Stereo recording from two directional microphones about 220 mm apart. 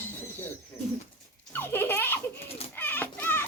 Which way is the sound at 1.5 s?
10° left (ahead or behind).